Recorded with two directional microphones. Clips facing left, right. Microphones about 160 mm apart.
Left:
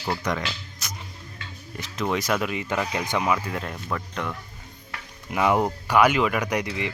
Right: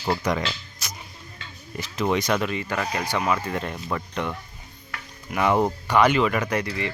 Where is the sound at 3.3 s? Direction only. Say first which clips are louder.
Right 2 dB; 5° left (ahead or behind).